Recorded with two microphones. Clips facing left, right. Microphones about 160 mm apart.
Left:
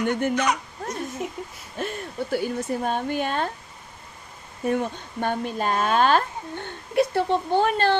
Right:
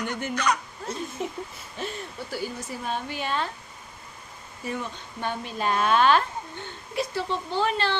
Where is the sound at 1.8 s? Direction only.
55° left (ahead or behind).